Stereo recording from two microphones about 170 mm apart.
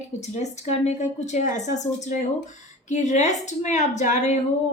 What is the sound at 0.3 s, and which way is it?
A woman's voice, 40° left (ahead or behind).